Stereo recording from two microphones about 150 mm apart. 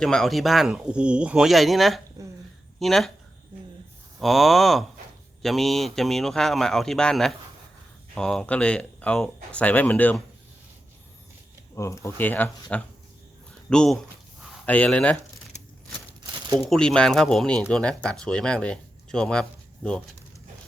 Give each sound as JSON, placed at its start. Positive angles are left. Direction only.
{"t": 0.0, "sound": "a man's voice", "side_deg": 5}
{"t": 4.2, "sound": "a man's voice", "side_deg": 0}
{"t": 11.7, "sound": "a man's voice", "side_deg": 20}
{"t": 16.6, "sound": "a man's voice", "side_deg": 5}